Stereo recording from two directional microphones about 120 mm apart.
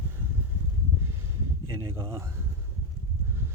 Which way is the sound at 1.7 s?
25° right (ahead or behind).